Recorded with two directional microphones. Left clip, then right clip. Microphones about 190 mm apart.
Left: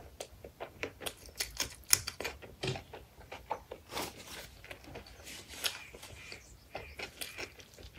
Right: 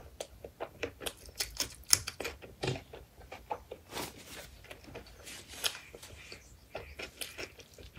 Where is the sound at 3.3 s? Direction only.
15° left (ahead or behind).